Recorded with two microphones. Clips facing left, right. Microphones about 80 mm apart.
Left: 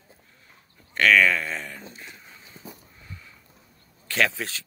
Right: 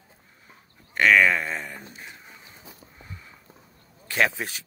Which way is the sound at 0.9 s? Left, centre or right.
Centre.